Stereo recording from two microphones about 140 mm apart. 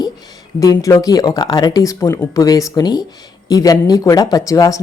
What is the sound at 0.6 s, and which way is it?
A woman's voice, 25° left (ahead or behind).